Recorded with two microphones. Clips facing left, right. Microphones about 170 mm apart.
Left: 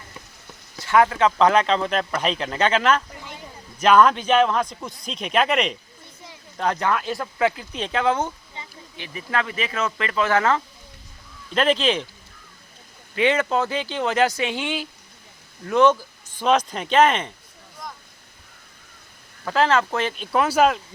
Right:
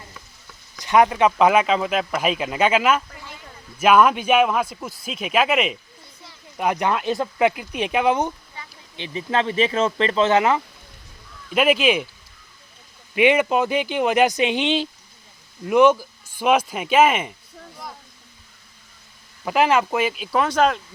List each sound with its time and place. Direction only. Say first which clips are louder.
0.8 s speech: right 1 dB; 20° right (ahead or behind)
8.6 s insect: left 1 dB; 25° left (ahead or behind)
9.0 s speech: right 4 dB; 25° right (ahead or behind)
13.1 s speech: right 3 dB; 15° right (ahead or behind)
19.5 s speech: right 1 dB; 15° right (ahead or behind); by 20.8 s 5° left (ahead or behind)